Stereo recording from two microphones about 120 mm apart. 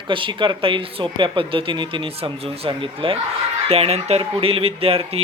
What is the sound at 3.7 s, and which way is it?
Speech, 60° right (ahead or behind).